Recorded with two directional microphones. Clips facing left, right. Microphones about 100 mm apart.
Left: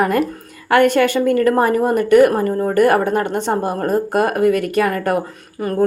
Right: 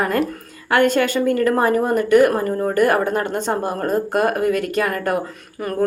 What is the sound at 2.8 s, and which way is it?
Speech, 50° left (ahead or behind).